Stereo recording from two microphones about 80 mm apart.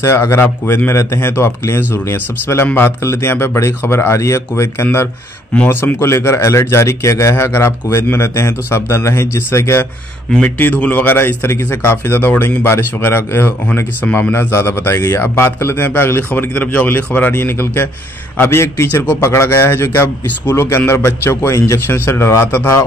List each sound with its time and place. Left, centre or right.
0.0 s speech: left
5.7 s speech: left
10.4 s a man's voice: centre
14.0 s speech: centre
14.3 s a man's voice: left